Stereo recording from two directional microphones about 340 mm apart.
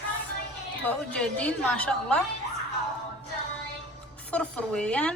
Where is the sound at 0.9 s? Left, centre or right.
Centre.